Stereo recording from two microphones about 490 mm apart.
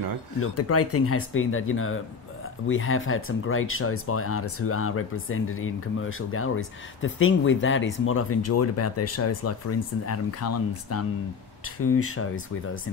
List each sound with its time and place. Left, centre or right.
0.4 s speech: left